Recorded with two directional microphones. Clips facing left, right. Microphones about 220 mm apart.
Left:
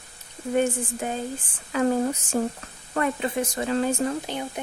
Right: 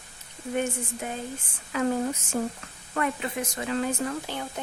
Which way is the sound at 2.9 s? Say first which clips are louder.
Left 4 dB; 30° left (ahead or behind).